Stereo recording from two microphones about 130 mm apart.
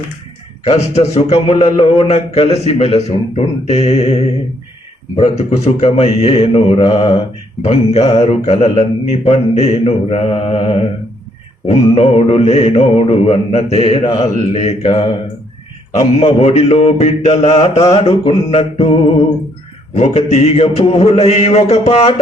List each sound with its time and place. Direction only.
0.7 s a man's voice: 60° left (ahead or behind)
7.6 s a man's voice: 55° left (ahead or behind)